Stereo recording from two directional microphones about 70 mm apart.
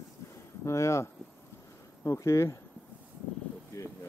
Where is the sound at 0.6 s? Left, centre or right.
Left.